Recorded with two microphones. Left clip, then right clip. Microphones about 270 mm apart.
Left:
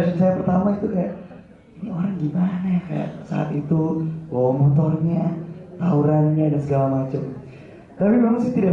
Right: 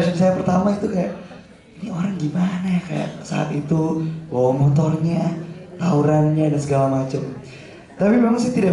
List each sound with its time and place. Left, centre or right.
0.0 s a man's voice: centre
3.7 s mantra: left
5.1 s a sound: centre
5.9 s speech: centre